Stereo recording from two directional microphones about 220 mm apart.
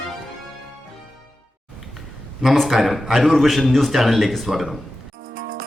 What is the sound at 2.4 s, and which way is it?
A man's voice, centre (ahead or behind).